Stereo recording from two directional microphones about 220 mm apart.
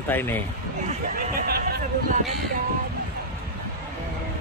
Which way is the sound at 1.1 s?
40° right (ahead or behind).